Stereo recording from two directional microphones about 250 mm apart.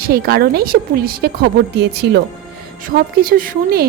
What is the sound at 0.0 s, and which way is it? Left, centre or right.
A woman's voice, right.